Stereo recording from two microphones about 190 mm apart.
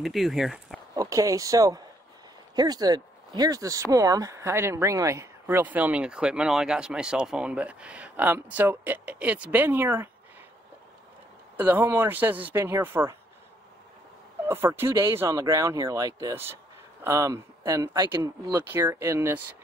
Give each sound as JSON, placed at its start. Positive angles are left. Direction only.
{"t": 0.0, "sound": "speech", "side_deg": 0}
{"t": 0.9, "sound": "speech", "side_deg": -15}
{"t": 11.5, "sound": "speech", "side_deg": -10}
{"t": 14.5, "sound": "speech", "side_deg": -10}